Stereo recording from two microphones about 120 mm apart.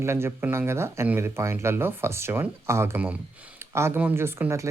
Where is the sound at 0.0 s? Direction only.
20° right (ahead or behind).